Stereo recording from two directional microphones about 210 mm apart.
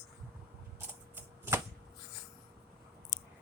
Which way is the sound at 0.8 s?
10° right (ahead or behind).